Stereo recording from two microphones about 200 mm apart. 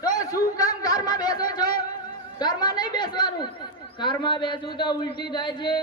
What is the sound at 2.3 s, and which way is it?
A man's voice, 20° left (ahead or behind).